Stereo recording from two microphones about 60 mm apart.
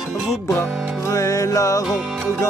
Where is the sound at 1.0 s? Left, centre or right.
Left.